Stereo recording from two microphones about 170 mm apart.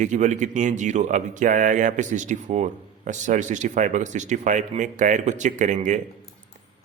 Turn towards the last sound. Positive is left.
turn(degrees=-45)  # may be behind; listen again after turning